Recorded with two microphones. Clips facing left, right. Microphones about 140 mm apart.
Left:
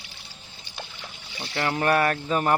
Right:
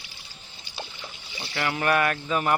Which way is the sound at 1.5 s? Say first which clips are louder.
Left 2 dB; 30° left (ahead or behind).